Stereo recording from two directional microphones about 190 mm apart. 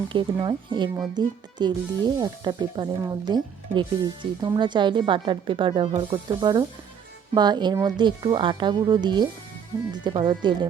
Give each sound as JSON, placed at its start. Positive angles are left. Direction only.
{"t": 0.1, "sound": "speech", "side_deg": -25}